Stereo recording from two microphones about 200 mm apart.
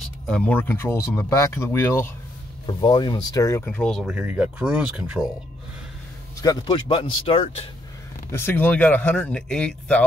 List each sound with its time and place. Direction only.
0.3 s speech: 5° left (ahead or behind)
2.6 s speech: 20° left (ahead or behind); by 5.3 s 5° right (ahead or behind)
6.4 s speech: 20° left (ahead or behind)
8.3 s speech: 10° left (ahead or behind)